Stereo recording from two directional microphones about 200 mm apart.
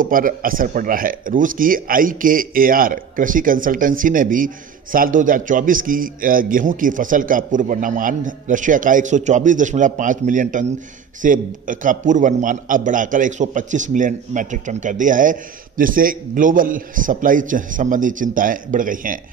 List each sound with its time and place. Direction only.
0.0 s a man's voice: 45° right (ahead or behind)